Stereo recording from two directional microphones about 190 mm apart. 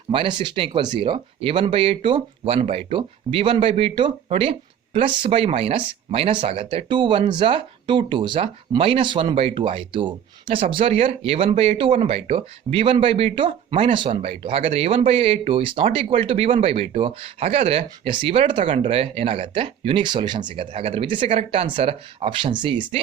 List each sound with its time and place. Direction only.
0.1 s speech: 25° right (ahead or behind)